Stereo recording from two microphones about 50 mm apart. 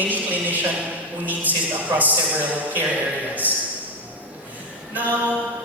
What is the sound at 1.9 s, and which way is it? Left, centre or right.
Speech, right.